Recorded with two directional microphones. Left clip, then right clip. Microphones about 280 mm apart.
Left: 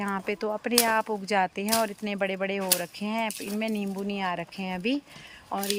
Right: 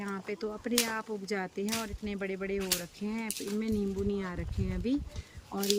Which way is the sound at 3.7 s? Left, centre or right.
Centre.